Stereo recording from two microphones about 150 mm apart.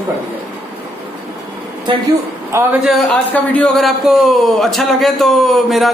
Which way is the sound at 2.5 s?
15° right (ahead or behind).